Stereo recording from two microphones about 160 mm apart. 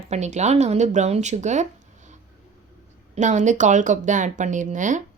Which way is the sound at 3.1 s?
50° right (ahead or behind).